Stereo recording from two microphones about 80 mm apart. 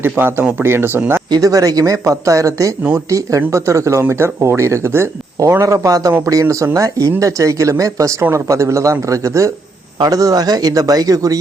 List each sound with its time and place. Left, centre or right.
0.0 s speech: right
1.3 s speech: right
5.4 s speech: right